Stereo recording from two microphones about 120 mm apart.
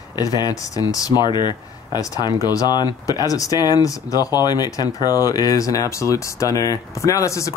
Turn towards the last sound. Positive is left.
turn(degrees=25)  # may be behind; listen again after turning